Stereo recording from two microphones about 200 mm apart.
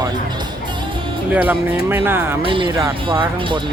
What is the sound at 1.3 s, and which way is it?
Speech, 10° right (ahead or behind).